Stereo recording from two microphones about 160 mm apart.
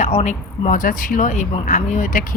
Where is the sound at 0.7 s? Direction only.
55° left (ahead or behind).